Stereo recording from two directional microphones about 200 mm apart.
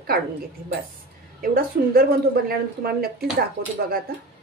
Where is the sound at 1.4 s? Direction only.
45° right (ahead or behind).